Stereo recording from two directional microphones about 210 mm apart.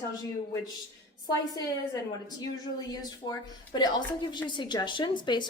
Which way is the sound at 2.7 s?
20° left (ahead or behind).